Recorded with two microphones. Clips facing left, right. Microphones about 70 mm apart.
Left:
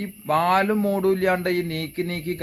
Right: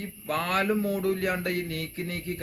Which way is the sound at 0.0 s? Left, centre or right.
Left.